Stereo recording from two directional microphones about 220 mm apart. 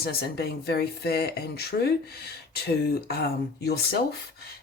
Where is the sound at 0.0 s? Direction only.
45° left (ahead or behind).